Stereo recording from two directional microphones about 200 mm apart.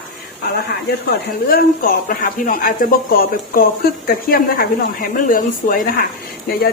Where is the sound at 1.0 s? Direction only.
45° left (ahead or behind).